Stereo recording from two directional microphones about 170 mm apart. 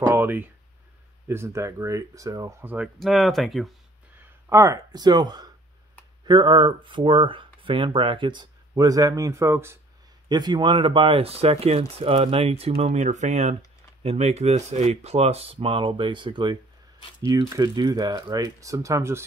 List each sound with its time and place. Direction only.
0.0 s speech: 10° right (ahead or behind)
3.0 s speech: centre (ahead or behind)
4.5 s speech: 15° right (ahead or behind)